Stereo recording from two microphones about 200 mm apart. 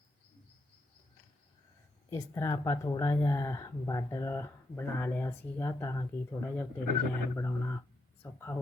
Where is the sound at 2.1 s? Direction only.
15° left (ahead or behind).